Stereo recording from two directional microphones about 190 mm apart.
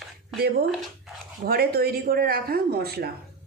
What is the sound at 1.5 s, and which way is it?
Speech, 55° right (ahead or behind).